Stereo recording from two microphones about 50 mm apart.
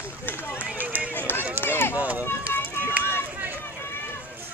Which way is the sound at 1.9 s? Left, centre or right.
Right.